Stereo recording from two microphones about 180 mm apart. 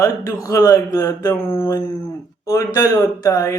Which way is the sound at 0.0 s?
20° left (ahead or behind).